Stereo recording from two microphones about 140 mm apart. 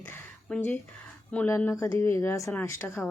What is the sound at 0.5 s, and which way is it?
Speech, 5° left (ahead or behind).